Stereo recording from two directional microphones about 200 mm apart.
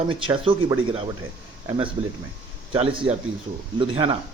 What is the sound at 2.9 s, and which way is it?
Speech, 25° right (ahead or behind).